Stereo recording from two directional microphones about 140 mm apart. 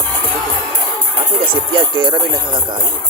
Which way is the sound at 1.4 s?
35° right (ahead or behind).